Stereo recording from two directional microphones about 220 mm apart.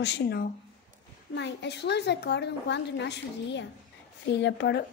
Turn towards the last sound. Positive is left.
turn(degrees=50)  # may be behind; listen again after turning